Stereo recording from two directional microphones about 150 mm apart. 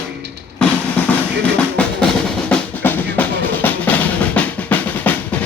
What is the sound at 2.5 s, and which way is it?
Drum, 10° left (ahead or behind).